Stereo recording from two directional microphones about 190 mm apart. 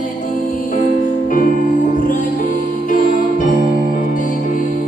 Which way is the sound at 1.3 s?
45° left (ahead or behind).